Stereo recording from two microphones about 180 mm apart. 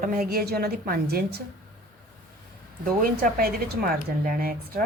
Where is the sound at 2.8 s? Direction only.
50° right (ahead or behind).